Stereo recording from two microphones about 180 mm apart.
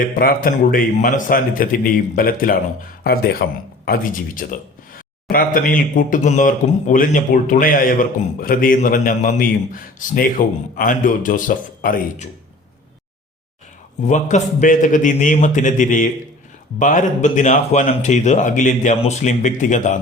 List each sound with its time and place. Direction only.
0.0 s speech: 50° left (ahead or behind)
14.1 s speech: 45° left (ahead or behind)